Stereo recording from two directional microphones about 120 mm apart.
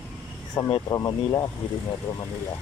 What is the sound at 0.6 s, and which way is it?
Speech, 40° left (ahead or behind).